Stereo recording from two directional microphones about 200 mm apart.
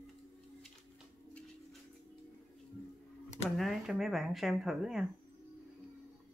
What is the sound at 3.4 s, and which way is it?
Speech, centre (ahead or behind).